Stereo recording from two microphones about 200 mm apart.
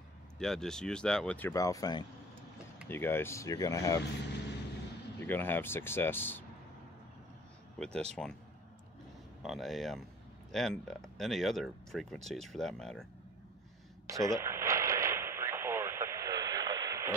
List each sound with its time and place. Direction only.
0.4 s speech: centre (ahead or behind)
5.2 s speech: 10° left (ahead or behind)
7.8 s speech: 5° left (ahead or behind)
9.4 s speech: centre (ahead or behind)
14.0 s radio: 15° right (ahead or behind)